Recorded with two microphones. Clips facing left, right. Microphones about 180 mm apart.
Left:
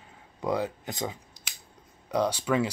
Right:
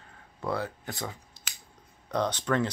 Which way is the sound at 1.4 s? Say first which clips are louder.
Even; 15° left (ahead or behind).